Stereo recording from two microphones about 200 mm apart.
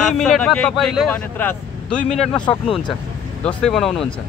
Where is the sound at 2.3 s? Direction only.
25° left (ahead or behind).